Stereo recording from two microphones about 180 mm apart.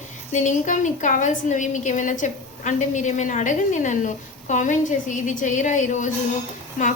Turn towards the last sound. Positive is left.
turn(degrees=45)  # may be behind; listen again after turning